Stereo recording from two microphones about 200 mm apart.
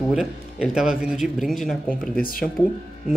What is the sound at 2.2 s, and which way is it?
Speech, 45° left (ahead or behind).